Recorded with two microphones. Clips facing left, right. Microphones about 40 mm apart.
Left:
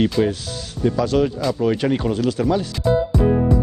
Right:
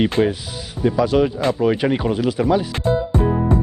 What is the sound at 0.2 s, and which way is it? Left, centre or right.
Speech, centre.